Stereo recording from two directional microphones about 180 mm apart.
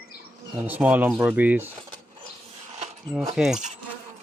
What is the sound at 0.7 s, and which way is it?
Speech, 10° right (ahead or behind).